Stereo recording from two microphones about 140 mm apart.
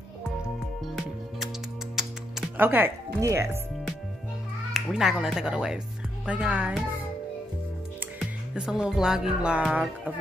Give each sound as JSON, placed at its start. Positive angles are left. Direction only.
{"t": 2.0, "sound": "music", "side_deg": -5}
{"t": 2.5, "sound": "speech", "side_deg": -15}
{"t": 4.7, "sound": "speech", "side_deg": -5}
{"t": 8.2, "sound": "music", "side_deg": -5}